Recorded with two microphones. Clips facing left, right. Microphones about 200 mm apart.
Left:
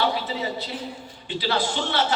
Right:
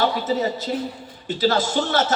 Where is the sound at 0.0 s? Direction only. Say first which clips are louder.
Right 4 dB; 45° right (ahead or behind).